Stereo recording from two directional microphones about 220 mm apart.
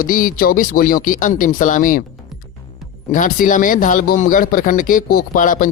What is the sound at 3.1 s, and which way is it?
Speech, 35° left (ahead or behind).